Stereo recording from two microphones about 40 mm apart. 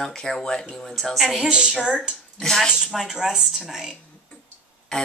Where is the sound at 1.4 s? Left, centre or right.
Right.